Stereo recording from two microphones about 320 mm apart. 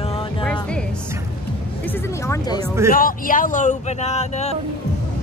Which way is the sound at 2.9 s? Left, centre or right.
Left.